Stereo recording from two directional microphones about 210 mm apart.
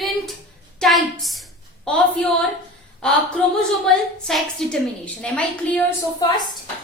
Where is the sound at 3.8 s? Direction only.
Centre (ahead or behind).